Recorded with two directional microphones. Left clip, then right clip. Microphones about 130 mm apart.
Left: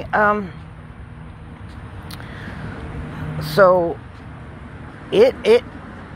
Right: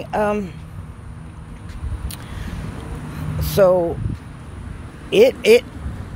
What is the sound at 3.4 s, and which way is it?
Speech, 25° right (ahead or behind).